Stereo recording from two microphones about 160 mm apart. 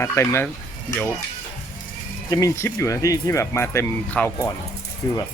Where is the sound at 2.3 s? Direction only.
20° left (ahead or behind).